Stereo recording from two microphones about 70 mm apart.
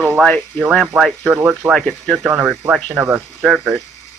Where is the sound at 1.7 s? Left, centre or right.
Centre.